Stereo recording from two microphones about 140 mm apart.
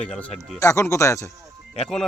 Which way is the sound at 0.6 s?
20° left (ahead or behind).